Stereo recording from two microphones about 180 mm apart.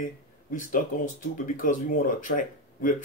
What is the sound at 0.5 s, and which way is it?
Speech, 45° left (ahead or behind).